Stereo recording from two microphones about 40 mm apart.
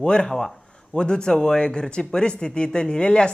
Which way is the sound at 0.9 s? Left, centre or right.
Left.